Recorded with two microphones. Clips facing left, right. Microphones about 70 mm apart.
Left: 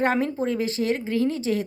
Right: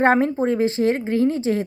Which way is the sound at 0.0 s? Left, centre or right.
Right.